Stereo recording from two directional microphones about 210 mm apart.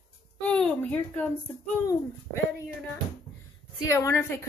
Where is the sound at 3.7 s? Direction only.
15° left (ahead or behind).